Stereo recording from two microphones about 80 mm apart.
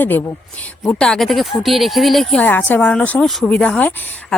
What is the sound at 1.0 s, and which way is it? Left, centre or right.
Speech, centre.